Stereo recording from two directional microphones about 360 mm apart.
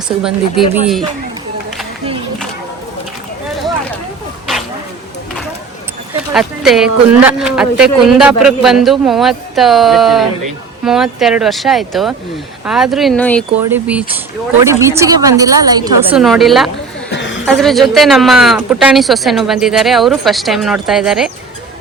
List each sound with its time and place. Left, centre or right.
0.2 s speech: centre
6.3 s a woman's voice: centre
17.1 s a sound: left
17.4 s speech: centre